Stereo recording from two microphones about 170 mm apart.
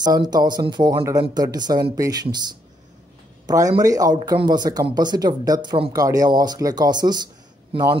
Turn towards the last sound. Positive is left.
turn(degrees=-35)  # may be behind; listen again after turning